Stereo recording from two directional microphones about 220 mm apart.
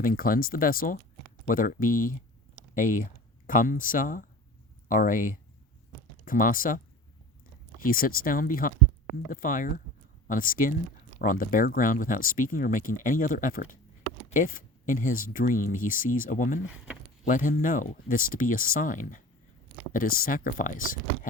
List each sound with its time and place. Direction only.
0.0 s speech: 40° left (ahead or behind)